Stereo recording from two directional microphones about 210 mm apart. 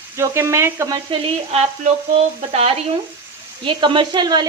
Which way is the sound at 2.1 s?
30° right (ahead or behind).